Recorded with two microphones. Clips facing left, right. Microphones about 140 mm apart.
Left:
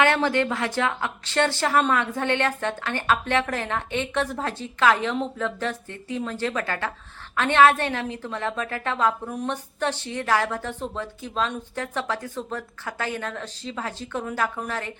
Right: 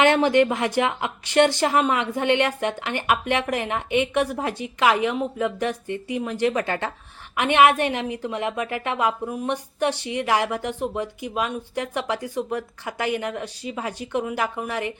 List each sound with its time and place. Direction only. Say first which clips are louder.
0.0 s a woman's voice: right 4 dB; 15° right (ahead or behind)